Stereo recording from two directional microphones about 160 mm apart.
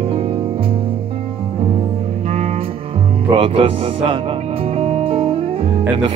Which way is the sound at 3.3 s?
35° right (ahead or behind).